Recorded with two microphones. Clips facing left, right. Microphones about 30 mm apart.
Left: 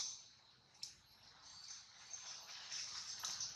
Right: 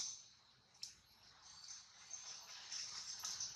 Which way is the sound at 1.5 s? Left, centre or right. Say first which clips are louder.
Left 1 dB; centre.